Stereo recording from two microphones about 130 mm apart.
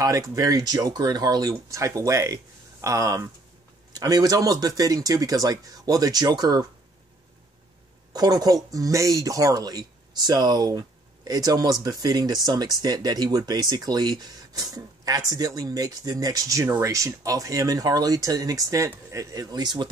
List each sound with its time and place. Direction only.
0.0 s speech: 25° right (ahead or behind)
8.1 s speech: 30° right (ahead or behind)